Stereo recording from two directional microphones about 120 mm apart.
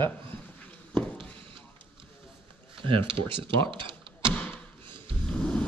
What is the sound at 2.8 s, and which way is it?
Speech, 45° right (ahead or behind).